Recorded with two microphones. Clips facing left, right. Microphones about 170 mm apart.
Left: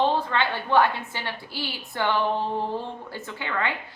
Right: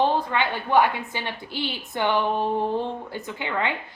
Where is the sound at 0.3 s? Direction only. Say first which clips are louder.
Right 1 dB; 15° right (ahead or behind).